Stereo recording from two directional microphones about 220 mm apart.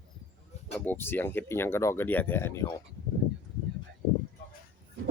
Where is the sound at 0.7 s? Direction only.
10° left (ahead or behind).